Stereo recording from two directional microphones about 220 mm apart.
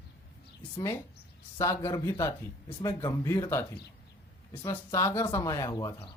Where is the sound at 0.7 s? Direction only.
15° left (ahead or behind).